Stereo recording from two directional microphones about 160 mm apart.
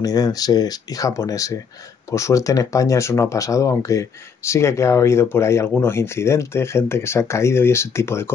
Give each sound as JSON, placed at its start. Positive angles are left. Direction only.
{"t": 0.0, "sound": "speech", "side_deg": 25}